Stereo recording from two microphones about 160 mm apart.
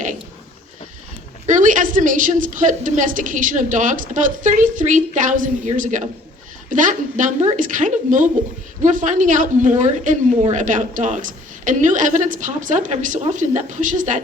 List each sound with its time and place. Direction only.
1.5 s a woman's voice: 55° right (ahead or behind)